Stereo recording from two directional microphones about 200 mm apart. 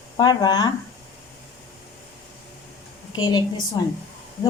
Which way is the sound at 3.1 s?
20° left (ahead or behind).